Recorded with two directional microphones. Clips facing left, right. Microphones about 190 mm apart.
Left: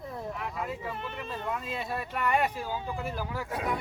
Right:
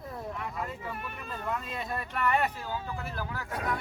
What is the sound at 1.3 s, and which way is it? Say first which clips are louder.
Speech: even; centre (ahead or behind).